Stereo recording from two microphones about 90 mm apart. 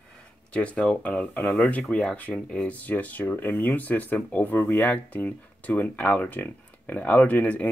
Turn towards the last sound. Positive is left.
turn(degrees=15)  # may be behind; listen again after turning